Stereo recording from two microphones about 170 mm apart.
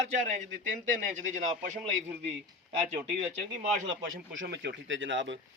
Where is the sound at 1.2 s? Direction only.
45° right (ahead or behind).